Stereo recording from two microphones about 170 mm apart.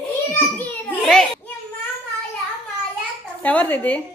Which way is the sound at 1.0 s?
5° left (ahead or behind).